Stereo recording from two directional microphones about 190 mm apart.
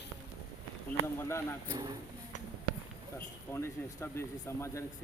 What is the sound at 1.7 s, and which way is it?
Speech, 20° right (ahead or behind).